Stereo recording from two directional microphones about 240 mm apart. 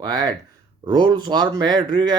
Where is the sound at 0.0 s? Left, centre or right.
Centre.